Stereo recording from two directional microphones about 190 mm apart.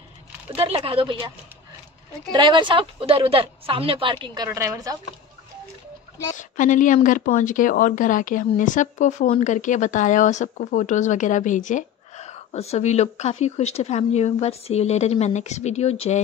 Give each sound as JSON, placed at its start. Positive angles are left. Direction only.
{"t": 0.6, "sound": "a woman's voice", "side_deg": -30}
{"t": 2.3, "sound": "a woman's voice", "side_deg": -25}
{"t": 6.3, "sound": "speech", "side_deg": 45}